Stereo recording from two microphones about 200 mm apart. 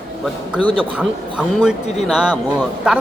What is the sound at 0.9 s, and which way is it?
A man's voice, 5° right (ahead or behind).